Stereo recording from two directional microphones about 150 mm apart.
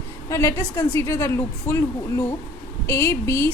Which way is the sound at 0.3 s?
20° left (ahead or behind).